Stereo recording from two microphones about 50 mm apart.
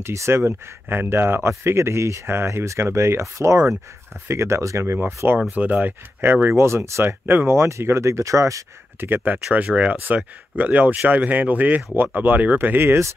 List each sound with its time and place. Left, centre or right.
0.0 s speech: right
0.4 s speech: right
1.6 s speech: right
2.3 s speech: right
4.3 s speech: right
4.9 s speech: right
5.6 s speech: right
6.5 s speech: right
9.0 s speech: right
10.0 s speech: right